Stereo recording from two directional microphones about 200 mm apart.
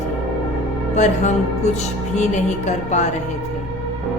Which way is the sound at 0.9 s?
35° left (ahead or behind).